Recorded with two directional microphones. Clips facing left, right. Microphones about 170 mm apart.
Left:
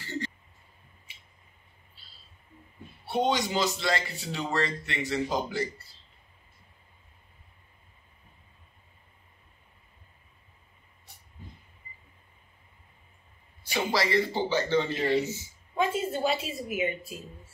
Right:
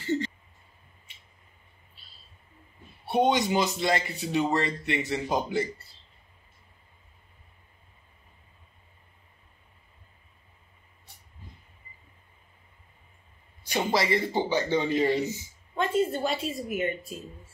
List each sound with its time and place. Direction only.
0.0 s a sound: 20° right (ahead or behind)
3.1 s a man's voice: 20° right (ahead or behind)
13.7 s speech: 20° right (ahead or behind)
15.7 s a woman's voice: 5° left (ahead or behind)